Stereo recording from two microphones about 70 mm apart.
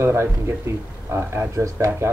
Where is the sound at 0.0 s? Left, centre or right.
Right.